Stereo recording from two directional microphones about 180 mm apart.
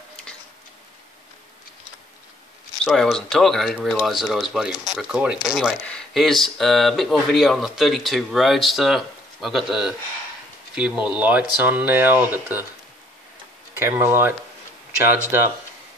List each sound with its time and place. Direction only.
2.8 s speech: centre (ahead or behind)
13.7 s speech: 10° right (ahead or behind)